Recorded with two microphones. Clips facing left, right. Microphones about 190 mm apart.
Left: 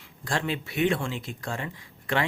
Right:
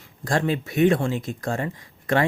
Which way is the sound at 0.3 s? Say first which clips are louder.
Right 6 dB; 45° right (ahead or behind).